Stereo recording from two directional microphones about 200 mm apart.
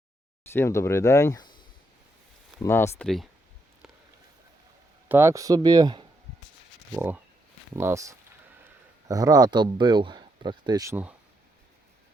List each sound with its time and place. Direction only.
0.5 s speech: 15° left (ahead or behind)
2.6 s speech: 10° left (ahead or behind)
5.0 s speech: 10° right (ahead or behind)
6.9 s speech: 10° right (ahead or behind)